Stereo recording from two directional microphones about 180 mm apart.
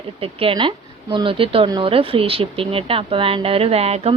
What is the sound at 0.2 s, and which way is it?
A woman's voice, 30° right (ahead or behind).